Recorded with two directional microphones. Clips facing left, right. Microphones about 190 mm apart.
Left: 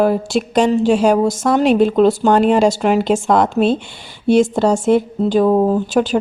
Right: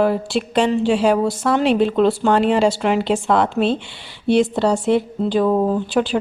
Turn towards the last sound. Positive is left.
turn(degrees=45)  # may be behind; listen again after turning